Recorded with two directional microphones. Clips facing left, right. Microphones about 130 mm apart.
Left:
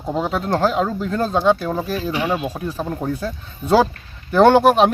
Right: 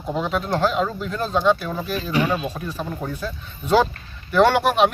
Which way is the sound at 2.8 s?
35° left (ahead or behind).